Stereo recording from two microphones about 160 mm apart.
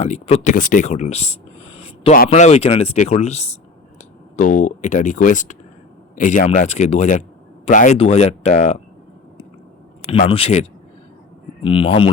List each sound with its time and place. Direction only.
0.0 s speech: 45° left (ahead or behind)
7.9 s speech: 40° left (ahead or behind)
10.2 s speech: 35° left (ahead or behind)